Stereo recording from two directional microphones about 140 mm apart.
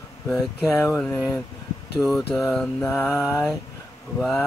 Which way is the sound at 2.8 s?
15° left (ahead or behind).